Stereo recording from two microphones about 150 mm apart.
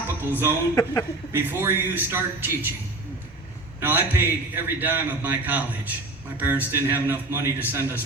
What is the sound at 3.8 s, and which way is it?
A man's voice, 10° right (ahead or behind).